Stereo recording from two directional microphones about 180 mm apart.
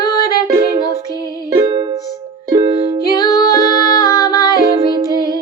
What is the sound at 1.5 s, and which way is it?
Music, 25° right (ahead or behind).